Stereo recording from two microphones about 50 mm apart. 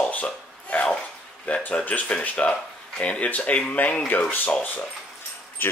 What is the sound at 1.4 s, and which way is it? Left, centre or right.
Speech, left.